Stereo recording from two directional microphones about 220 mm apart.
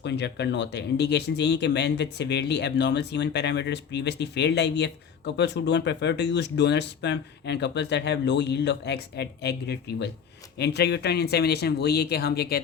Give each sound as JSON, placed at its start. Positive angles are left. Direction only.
{"t": 0.0, "sound": "speech", "side_deg": 50}